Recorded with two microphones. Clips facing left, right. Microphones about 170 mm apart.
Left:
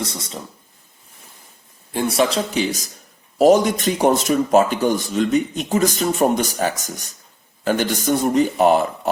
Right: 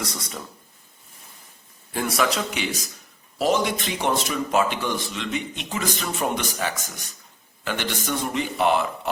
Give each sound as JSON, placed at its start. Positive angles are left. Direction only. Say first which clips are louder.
{"t": 0.0, "sound": "speech", "louder": "left 4 dB", "side_deg": 25}
{"t": 1.9, "sound": "speech", "louder": "left 5 dB", "side_deg": 25}